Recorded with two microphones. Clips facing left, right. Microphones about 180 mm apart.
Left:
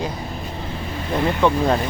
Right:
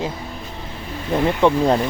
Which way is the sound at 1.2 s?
25° right (ahead or behind).